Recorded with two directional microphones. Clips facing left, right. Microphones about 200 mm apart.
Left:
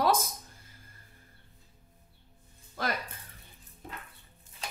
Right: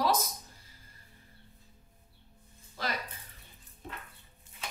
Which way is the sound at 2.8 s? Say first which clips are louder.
Left 3 dB; 50° left (ahead or behind).